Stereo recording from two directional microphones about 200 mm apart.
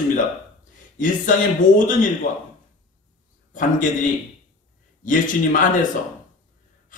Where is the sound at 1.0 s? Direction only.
40° left (ahead or behind).